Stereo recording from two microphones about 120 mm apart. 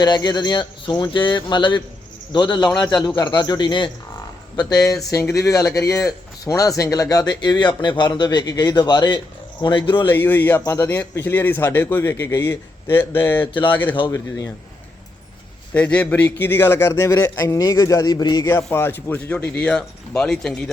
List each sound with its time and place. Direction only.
0.0 s speech: 35° left (ahead or behind)
4.5 s speech: 30° left (ahead or behind)
10.0 s a man's voice: 15° left (ahead or behind)
10.6 s a man's voice: 25° left (ahead or behind)
14.1 s a man's voice: 25° left (ahead or behind)
15.7 s a man's voice: 10° left (ahead or behind); by 18.4 s 35° left (ahead or behind)
18.4 s a man's voice: 20° left (ahead or behind)